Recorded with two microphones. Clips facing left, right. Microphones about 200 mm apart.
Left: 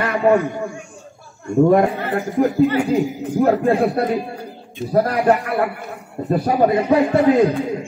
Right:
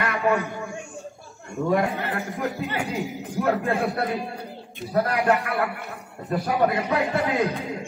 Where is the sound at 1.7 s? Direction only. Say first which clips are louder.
Left 7 dB; 50° left (ahead or behind).